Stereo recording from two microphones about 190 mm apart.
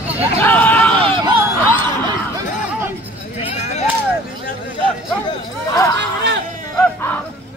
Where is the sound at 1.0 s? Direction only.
30° right (ahead or behind).